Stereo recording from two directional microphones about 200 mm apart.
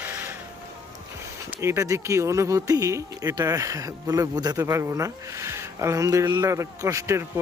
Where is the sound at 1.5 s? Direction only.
15° right (ahead or behind).